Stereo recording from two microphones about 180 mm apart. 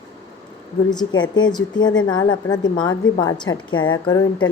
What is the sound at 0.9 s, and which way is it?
A woman's voice, 25° left (ahead or behind).